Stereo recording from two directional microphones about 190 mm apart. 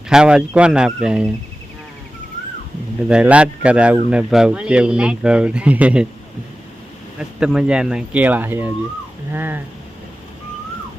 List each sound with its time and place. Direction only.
0.1 s speech: 5° right (ahead or behind)
3.1 s speech: 5° right (ahead or behind)
7.2 s speech: 5° right (ahead or behind)